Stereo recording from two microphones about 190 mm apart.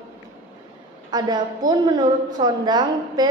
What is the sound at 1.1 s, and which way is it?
A woman's voice, 20° right (ahead or behind).